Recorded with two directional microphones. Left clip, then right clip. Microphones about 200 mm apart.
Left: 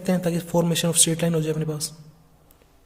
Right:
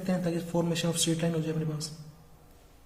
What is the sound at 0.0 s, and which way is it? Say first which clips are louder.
A man's voice: left 6 dB; 55° left (ahead or behind).